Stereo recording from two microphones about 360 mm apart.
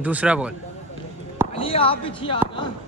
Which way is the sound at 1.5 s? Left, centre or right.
Centre.